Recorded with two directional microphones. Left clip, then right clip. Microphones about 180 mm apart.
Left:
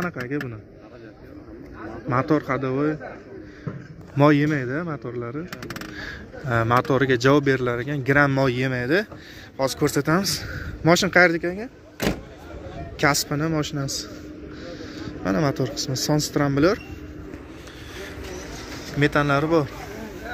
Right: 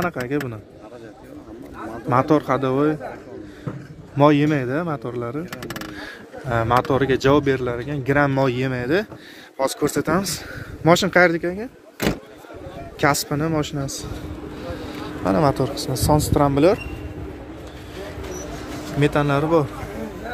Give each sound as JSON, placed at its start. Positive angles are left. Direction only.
{"t": 2.0, "sound": "speech", "side_deg": -15}
{"t": 4.2, "sound": "speech", "side_deg": 5}
{"t": 4.5, "sound": "speech", "side_deg": -15}
{"t": 5.9, "sound": "speech", "side_deg": 0}
{"t": 10.9, "sound": "speech", "side_deg": -10}
{"t": 13.0, "sound": "speech", "side_deg": -10}
{"t": 18.9, "sound": "speech", "side_deg": -5}